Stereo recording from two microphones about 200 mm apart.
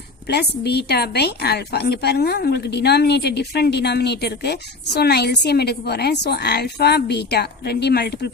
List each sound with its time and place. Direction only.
0.3 s speech: 55° left (ahead or behind)